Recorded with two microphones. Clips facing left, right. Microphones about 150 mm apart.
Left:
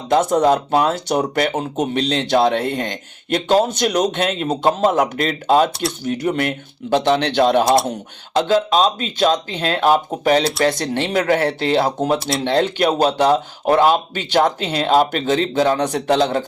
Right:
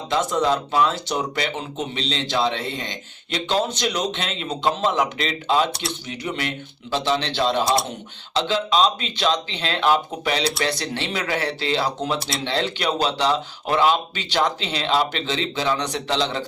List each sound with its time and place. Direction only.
0.1 s speech: 50° left (ahead or behind)